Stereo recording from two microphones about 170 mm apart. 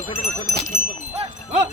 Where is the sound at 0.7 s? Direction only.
40° right (ahead or behind).